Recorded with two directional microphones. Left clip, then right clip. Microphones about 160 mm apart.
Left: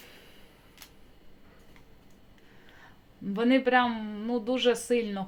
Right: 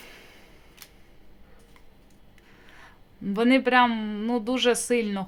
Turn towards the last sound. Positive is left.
turn(degrees=-25)  # may be behind; listen again after turning